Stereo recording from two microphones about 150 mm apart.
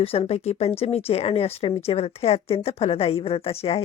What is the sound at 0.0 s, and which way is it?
A woman's voice, 40° left (ahead or behind).